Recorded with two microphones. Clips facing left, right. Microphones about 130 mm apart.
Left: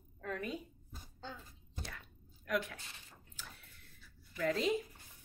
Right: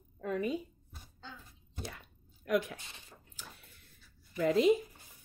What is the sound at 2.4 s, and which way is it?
Speech, 20° right (ahead or behind).